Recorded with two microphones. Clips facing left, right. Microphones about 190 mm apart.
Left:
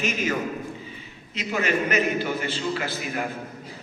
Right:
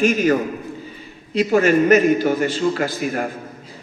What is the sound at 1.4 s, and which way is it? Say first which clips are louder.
A man's voice: right 10 dB; 45° right (ahead or behind).